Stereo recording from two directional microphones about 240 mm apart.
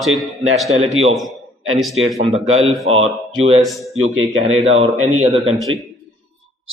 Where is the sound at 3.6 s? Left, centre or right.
Centre.